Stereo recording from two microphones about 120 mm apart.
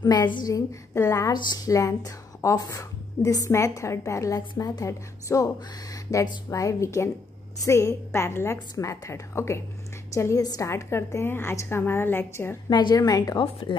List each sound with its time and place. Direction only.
0.0 s speech: 35° left (ahead or behind)
1.3 s speech: 35° left (ahead or behind)
12.6 s a woman's voice: 35° left (ahead or behind)